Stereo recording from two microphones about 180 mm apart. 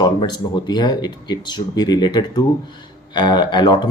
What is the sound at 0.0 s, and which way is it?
Speech, 25° left (ahead or behind).